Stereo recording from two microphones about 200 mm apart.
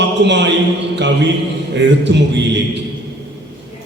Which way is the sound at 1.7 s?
60° right (ahead or behind).